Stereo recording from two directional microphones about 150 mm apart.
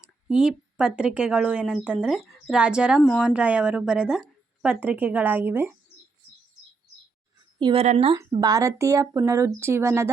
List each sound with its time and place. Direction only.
0.0 s speech: 5° right (ahead or behind)
7.6 s speech: 35° right (ahead or behind)
8.4 s speech: 25° right (ahead or behind)